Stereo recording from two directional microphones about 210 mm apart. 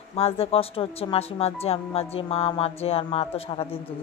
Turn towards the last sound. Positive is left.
turn(degrees=25)  # may be behind; listen again after turning